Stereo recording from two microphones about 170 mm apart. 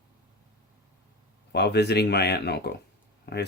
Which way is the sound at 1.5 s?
75° left (ahead or behind).